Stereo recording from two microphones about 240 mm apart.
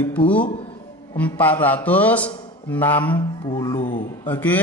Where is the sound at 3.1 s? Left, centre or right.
Centre.